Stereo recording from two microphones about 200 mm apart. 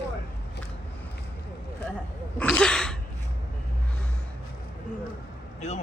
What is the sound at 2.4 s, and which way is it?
Throat clearing, 5° left (ahead or behind).